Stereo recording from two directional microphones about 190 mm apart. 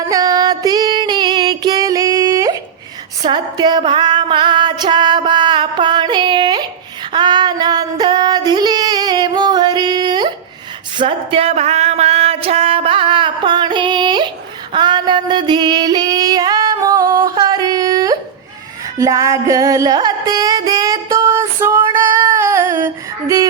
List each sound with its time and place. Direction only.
0.1 s female singing: 20° right (ahead or behind)
3.2 s music: 25° right (ahead or behind)
7.1 s female singing: 25° right (ahead or behind)
10.9 s a sound: 30° right (ahead or behind)
14.7 s female singing: 25° right (ahead or behind)
18.9 s music: 15° right (ahead or behind)